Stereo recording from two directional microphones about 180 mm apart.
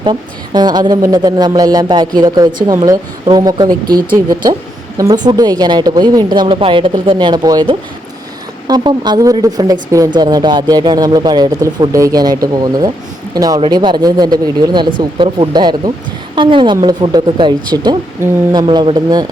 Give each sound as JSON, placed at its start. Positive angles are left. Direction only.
{"t": 0.0, "sound": "a woman's voice", "side_deg": -25}